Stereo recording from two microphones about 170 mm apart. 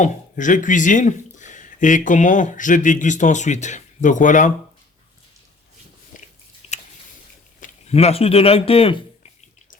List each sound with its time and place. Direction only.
0.0 s speech: 50° left (ahead or behind)
6.6 s chewing: 35° left (ahead or behind)
7.6 s speech: 40° left (ahead or behind)